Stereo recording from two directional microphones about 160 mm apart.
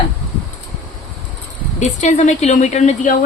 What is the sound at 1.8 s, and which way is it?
Speech, 45° left (ahead or behind).